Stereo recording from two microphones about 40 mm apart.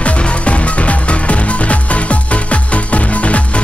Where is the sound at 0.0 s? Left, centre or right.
Left.